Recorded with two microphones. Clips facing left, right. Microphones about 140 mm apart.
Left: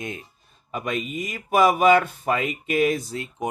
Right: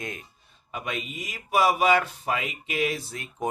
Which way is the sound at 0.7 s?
45° left (ahead or behind).